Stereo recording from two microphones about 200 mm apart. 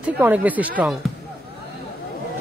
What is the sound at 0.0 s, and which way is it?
Speech, 10° right (ahead or behind).